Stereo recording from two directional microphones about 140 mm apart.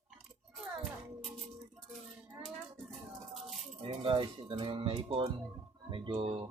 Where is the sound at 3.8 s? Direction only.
40° right (ahead or behind).